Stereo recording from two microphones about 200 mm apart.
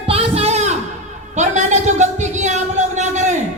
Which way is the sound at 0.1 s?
30° right (ahead or behind).